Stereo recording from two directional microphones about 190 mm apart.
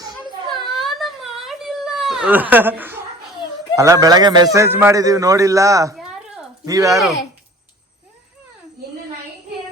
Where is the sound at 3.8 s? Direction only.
15° right (ahead or behind).